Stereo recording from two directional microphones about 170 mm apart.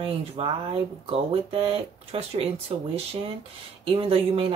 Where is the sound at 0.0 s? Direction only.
35° right (ahead or behind).